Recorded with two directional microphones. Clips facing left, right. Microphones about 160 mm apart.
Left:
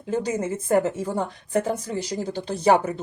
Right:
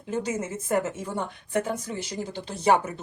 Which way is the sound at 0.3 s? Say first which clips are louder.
Left 5 dB; 30° left (ahead or behind).